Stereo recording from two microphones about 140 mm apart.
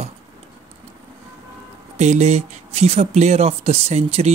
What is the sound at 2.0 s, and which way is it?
Speech, 55° right (ahead or behind).